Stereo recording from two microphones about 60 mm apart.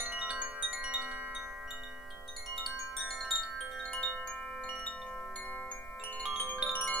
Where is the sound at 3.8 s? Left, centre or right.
Centre.